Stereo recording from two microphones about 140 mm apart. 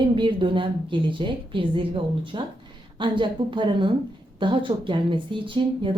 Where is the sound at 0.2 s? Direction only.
35° right (ahead or behind).